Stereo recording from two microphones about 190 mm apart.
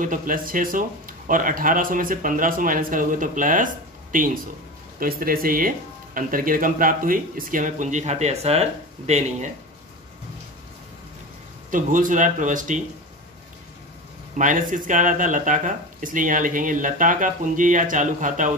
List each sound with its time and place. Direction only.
0.0 s speech: 45° right (ahead or behind)
11.7 s speech: 45° right (ahead or behind)
14.3 s speech: 45° right (ahead or behind)